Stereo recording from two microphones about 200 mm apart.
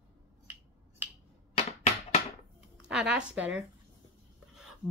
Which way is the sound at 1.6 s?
30° left (ahead or behind).